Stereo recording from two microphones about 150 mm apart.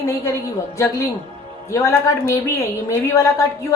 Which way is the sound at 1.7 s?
20° left (ahead or behind).